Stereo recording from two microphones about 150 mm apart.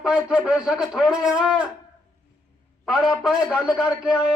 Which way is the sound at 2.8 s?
5° right (ahead or behind).